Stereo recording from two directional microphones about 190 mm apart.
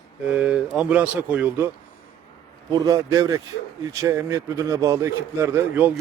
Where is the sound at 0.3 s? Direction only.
5° right (ahead or behind).